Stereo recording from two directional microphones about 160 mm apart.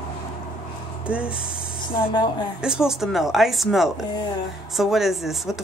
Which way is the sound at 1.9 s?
30° left (ahead or behind).